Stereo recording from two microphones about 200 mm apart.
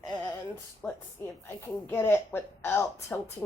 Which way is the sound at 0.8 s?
10° left (ahead or behind).